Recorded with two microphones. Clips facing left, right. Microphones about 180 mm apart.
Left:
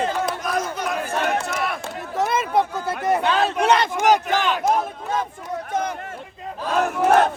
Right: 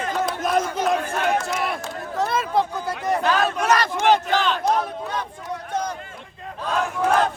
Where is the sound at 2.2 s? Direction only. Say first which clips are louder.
Left 1 dB; 20° left (ahead or behind).